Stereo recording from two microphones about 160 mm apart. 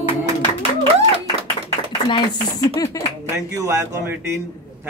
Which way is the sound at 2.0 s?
25° left (ahead or behind).